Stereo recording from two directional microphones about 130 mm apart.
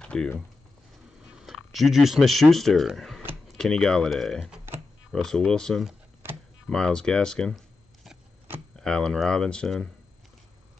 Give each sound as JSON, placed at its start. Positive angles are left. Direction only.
{"t": 0.0, "sound": "typing", "side_deg": 5}
{"t": 1.3, "sound": "speech", "side_deg": 0}
{"t": 6.2, "sound": "power windows", "side_deg": -20}
{"t": 6.7, "sound": "speech", "side_deg": 5}